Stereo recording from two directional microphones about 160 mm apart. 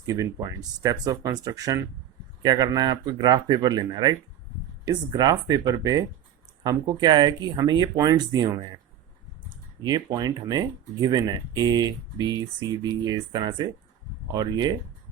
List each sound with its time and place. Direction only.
0.0 s speech: 20° right (ahead or behind)
9.8 s speech: 25° right (ahead or behind)